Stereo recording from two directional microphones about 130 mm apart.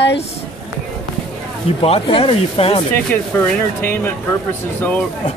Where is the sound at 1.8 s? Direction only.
45° left (ahead or behind).